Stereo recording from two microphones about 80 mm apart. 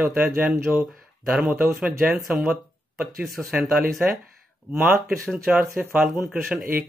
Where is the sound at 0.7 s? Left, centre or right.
Centre.